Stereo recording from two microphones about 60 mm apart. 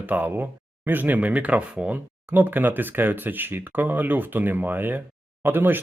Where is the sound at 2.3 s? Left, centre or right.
Right.